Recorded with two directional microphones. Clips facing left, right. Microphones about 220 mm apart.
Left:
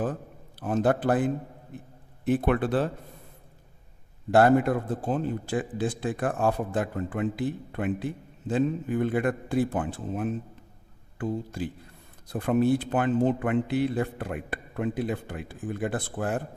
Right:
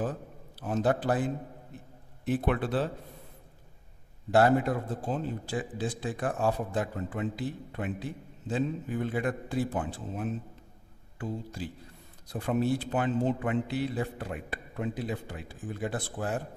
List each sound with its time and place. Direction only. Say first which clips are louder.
0.6 s a man's voice: left 3 dB; 55° left (ahead or behind)
4.3 s a man's voice: left 4 dB; 55° left (ahead or behind)